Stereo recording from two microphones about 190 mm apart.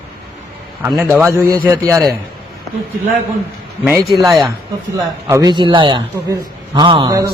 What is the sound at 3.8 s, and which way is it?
A man's voice, 10° right (ahead or behind).